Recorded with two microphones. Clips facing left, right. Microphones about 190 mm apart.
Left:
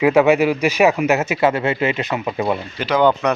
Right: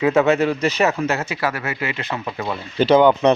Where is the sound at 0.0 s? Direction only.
10° left (ahead or behind).